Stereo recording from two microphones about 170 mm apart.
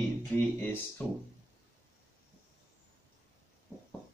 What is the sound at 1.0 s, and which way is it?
Speech, 10° left (ahead or behind).